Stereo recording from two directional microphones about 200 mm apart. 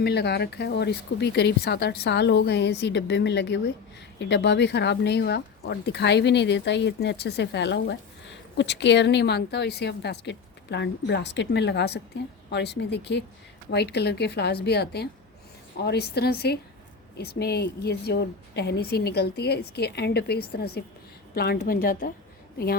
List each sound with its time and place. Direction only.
0.0 s a woman's voice: 55° left (ahead or behind)